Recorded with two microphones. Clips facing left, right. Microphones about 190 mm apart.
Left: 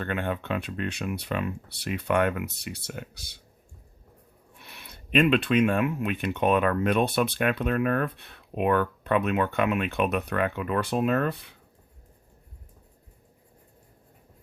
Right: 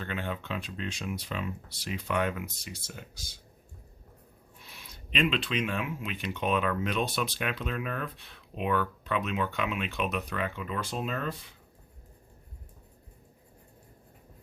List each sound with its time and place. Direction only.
0.0 s speech: 55° left (ahead or behind)
4.5 s speech: 65° left (ahead or behind)